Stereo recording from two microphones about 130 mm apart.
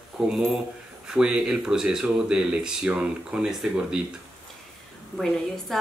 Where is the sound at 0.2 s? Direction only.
10° right (ahead or behind).